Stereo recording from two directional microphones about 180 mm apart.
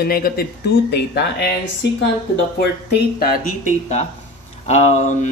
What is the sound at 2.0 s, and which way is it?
Speech, 80° left.